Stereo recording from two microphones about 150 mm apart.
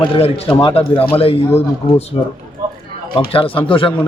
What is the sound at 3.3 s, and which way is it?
Speech, 35° left (ahead or behind).